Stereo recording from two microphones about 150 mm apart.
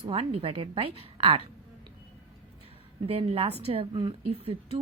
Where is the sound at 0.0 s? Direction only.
40° right (ahead or behind).